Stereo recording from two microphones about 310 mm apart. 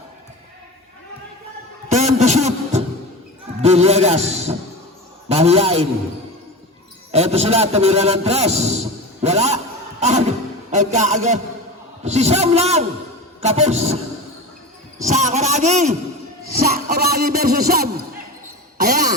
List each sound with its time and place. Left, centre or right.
1.9 s a sound: right
3.6 s a man's voice: centre
7.1 s a man's voice: centre
15.0 s a man's voice: right